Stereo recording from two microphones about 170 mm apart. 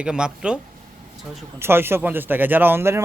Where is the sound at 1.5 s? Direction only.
15° right (ahead or behind).